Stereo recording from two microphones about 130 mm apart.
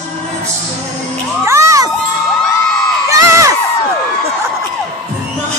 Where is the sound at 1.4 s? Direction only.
20° right (ahead or behind).